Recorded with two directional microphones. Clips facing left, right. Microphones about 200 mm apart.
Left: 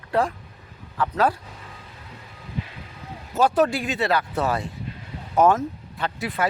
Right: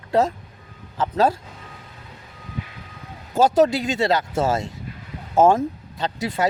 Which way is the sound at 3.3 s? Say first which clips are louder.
Right 3 dB; 25° right (ahead or behind).